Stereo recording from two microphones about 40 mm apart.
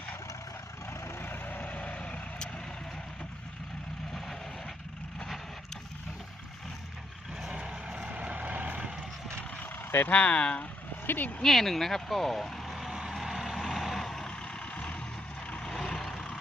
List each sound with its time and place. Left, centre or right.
0.9 s vehicle: left
7.5 s vehicle: right
9.6 s vehicle: left
10.1 s speech: left
11.0 s speech: left
11.4 s speech: centre
12.6 s vehicle: centre
14.0 s vehicle: centre
14.3 s vehicle: left
15.8 s vehicle: centre